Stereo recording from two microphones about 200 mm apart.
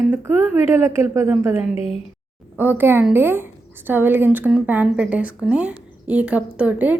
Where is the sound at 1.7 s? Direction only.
30° left (ahead or behind).